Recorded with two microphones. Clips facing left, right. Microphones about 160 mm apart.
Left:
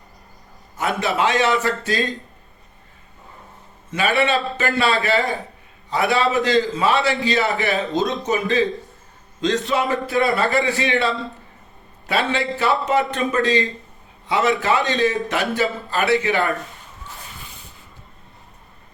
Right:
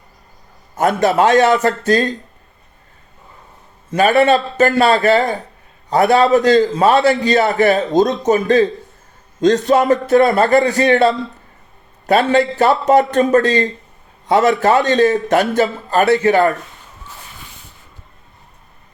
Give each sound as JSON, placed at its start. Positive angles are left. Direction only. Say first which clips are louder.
{"t": 0.8, "sound": "a man's voice", "louder": "right 7 dB", "side_deg": -45}
{"t": 3.9, "sound": "a man's voice", "louder": "right 7 dB", "side_deg": -40}